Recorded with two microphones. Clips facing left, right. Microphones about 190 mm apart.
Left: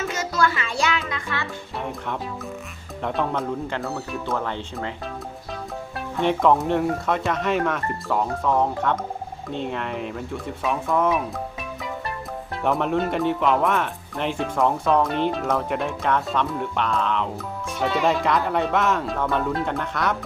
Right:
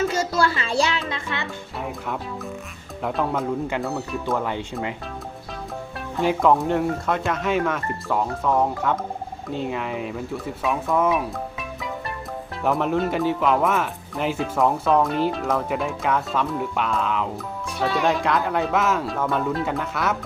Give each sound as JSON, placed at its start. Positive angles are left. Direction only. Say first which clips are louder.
{"t": 0.0, "sound": "music", "louder": "right 2 dB", "side_deg": -30}
{"t": 3.0, "sound": "speech", "louder": "right 1 dB", "side_deg": -5}
{"t": 4.4, "sound": "speech", "louder": "right 2 dB", "side_deg": -10}
{"t": 6.1, "sound": "speech", "louder": "even", "side_deg": 0}
{"t": 12.6, "sound": "speech", "louder": "right 1 dB", "side_deg": 0}